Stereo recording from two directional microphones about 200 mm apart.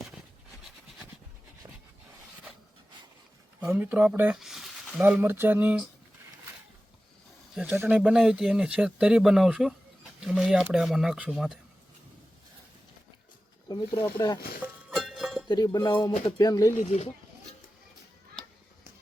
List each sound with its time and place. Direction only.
3.6 s speech: 10° right (ahead or behind)
7.5 s speech: 5° right (ahead or behind)
13.7 s speech: 15° left (ahead or behind)
14.6 s music: centre (ahead or behind)
15.4 s cutlery: 20° left (ahead or behind)
16.4 s speech: 15° left (ahead or behind)
16.8 s speech: 35° left (ahead or behind)